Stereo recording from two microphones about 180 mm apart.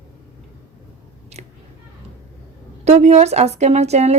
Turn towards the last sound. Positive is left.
turn(degrees=-35)  # may be behind; listen again after turning